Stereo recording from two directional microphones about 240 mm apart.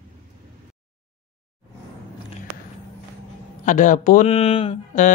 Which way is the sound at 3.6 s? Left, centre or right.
Left.